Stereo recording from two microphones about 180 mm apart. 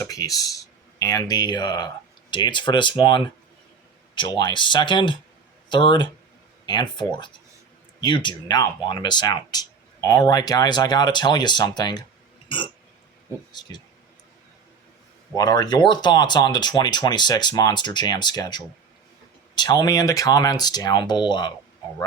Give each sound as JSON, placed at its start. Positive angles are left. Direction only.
{"t": 0.0, "sound": "speech", "side_deg": 20}
{"t": 12.5, "sound": "a sound", "side_deg": 25}
{"t": 13.5, "sound": "speech", "side_deg": 25}
{"t": 15.4, "sound": "speech", "side_deg": 20}